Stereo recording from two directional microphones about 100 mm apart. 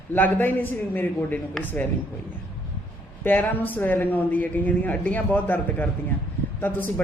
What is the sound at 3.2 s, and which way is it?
A man's voice, 15° left (ahead or behind).